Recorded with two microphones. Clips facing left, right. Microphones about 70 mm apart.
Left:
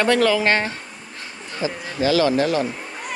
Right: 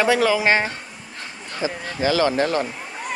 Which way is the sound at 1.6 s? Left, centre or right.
Right.